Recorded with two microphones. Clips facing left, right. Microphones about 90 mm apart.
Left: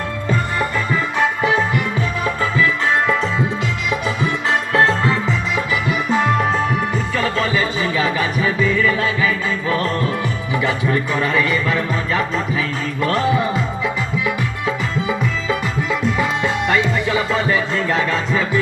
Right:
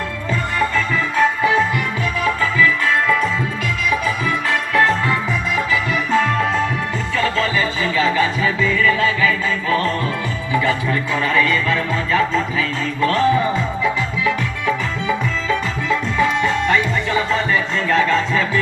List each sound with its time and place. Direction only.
1.1 s music: 20° left (ahead or behind)
4.2 s music: 25° left (ahead or behind)
6.1 s music: 15° left (ahead or behind)
10.5 s speech: 15° left (ahead or behind)
15.4 s music: 15° left (ahead or behind)